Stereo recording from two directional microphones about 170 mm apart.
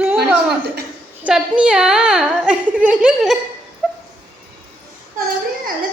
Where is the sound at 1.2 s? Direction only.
5° right (ahead or behind).